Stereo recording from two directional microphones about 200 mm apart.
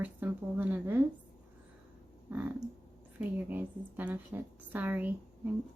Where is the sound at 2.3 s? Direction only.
10° right (ahead or behind).